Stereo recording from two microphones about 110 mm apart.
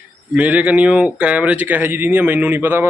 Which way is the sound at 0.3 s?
15° right (ahead or behind).